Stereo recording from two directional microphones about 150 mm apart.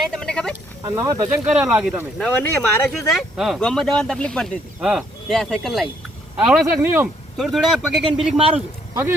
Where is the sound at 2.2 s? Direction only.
10° left (ahead or behind).